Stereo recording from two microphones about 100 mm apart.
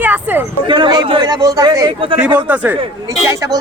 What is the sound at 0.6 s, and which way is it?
A man's voice, 50° right (ahead or behind).